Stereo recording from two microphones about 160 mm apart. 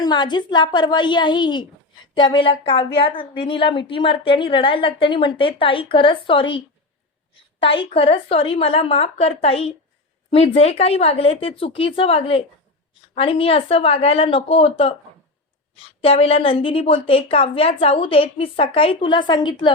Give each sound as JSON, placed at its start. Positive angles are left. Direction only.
{"t": 0.0, "sound": "a woman's voice", "side_deg": 25}
{"t": 7.6, "sound": "a woman's voice", "side_deg": 35}